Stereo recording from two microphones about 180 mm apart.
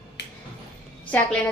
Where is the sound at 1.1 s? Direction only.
10° left (ahead or behind).